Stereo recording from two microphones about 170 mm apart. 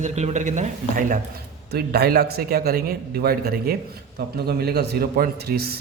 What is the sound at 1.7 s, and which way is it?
A man's voice, 65° right (ahead or behind).